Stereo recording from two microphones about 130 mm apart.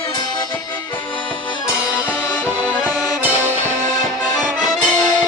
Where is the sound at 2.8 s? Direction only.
15° right (ahead or behind).